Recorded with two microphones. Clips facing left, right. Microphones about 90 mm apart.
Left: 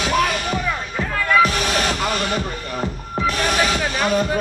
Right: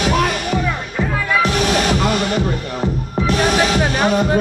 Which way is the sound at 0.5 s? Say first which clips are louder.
Right 3 dB; 5° right (ahead or behind).